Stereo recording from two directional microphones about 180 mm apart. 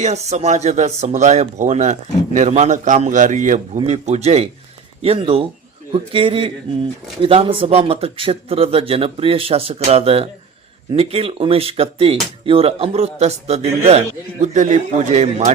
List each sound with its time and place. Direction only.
0.0 s a man's voice: 40° right (ahead or behind)